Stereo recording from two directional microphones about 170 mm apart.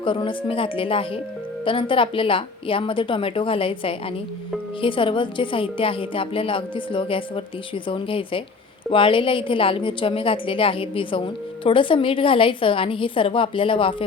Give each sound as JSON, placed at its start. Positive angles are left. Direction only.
{"t": 0.0, "sound": "a woman's voice", "side_deg": 30}